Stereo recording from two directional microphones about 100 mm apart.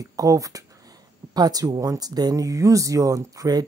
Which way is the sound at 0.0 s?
35° right (ahead or behind).